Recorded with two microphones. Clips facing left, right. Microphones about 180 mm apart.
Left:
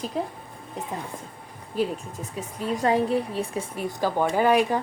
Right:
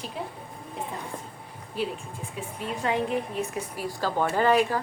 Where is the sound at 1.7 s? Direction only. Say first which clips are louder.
Left 4 dB; 40° left (ahead or behind); by 4.8 s 15° left (ahead or behind).